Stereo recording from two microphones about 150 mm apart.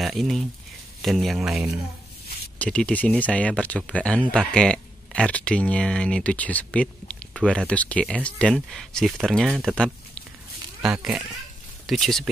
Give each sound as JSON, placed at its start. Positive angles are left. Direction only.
{"t": 0.0, "sound": "speech", "side_deg": 0}
{"t": 2.6, "sound": "speech", "side_deg": 10}